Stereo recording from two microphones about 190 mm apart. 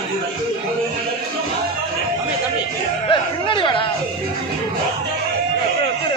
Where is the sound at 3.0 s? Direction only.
25° left (ahead or behind).